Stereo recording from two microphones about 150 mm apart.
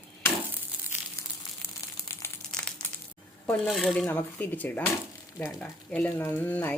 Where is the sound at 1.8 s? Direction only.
25° left (ahead or behind).